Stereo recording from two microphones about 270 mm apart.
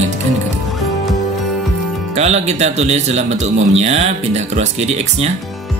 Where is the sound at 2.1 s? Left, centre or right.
Right.